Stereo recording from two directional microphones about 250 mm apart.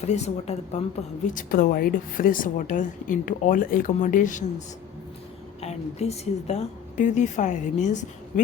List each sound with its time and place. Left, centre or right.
0.0 s a woman's voice: left
5.5 s a woman's voice: left